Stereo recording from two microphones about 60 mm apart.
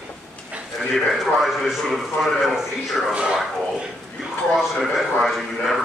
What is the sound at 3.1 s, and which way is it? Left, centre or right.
Speech, centre.